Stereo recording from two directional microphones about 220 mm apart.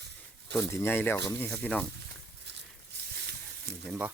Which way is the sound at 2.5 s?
50° right (ahead or behind).